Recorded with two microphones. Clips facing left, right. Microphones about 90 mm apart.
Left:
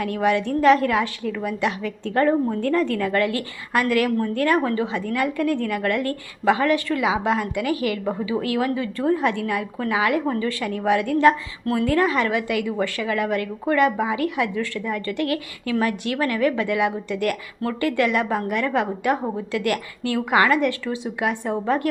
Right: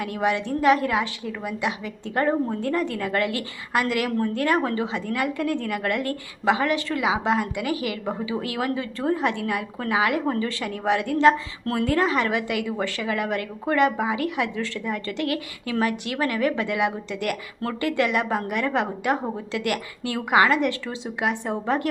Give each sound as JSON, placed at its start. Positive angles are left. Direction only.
{"t": 0.2, "sound": "a woman's voice", "side_deg": -20}
{"t": 11.6, "sound": "speech", "side_deg": -40}
{"t": 11.9, "sound": "a woman's voice", "side_deg": -25}